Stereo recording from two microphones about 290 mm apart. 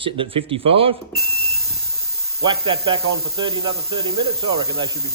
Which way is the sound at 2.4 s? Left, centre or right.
Centre.